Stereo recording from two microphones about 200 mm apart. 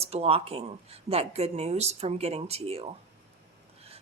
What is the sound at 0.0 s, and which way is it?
Speech, 30° right (ahead or behind).